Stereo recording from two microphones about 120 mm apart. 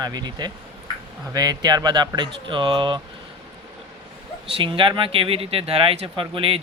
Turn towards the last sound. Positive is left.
turn(degrees=-50)  # may be behind; listen again after turning